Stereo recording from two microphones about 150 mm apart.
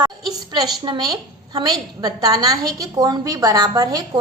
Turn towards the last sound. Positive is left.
turn(degrees=-25)  # may be behind; listen again after turning